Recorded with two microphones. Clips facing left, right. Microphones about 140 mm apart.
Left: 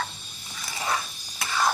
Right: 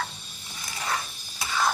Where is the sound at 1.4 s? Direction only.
Centre (ahead or behind).